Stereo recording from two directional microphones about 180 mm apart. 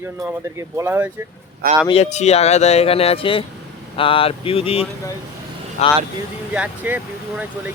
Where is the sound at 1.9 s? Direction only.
35° left (ahead or behind).